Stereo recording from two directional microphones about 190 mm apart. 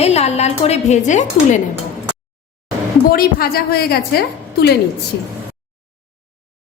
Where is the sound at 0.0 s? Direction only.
35° left (ahead or behind).